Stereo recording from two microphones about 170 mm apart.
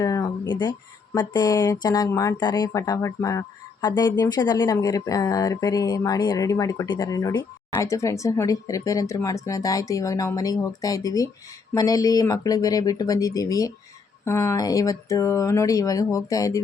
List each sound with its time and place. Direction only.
0.0 s speech: 20° left (ahead or behind)